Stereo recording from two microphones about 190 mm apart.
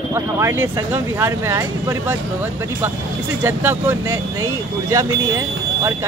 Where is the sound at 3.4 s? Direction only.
10° right (ahead or behind).